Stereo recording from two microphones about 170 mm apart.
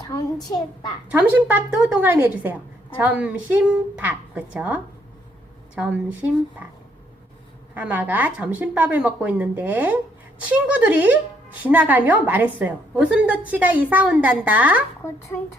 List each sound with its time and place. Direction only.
0.1 s a child's voice: 20° left (ahead or behind)
1.2 s a woman's voice: 10° right (ahead or behind)
7.7 s a woman's voice: 10° right (ahead or behind)